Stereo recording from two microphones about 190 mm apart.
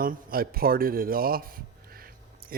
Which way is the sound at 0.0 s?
50° right (ahead or behind).